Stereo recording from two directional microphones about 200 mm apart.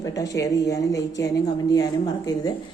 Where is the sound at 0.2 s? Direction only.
15° left (ahead or behind).